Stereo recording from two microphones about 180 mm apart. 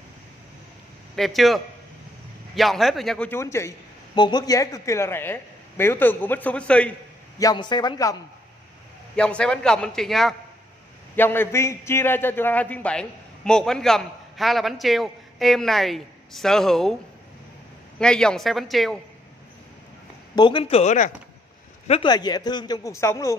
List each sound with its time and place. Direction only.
1.1 s a man's voice: centre (ahead or behind)
7.3 s speech: 20° left (ahead or behind)
9.1 s a man's voice: 5° left (ahead or behind)
17.9 s a man's voice: 5° left (ahead or behind)
20.3 s a man's voice: 25° left (ahead or behind)
22.1 s speech: 20° left (ahead or behind)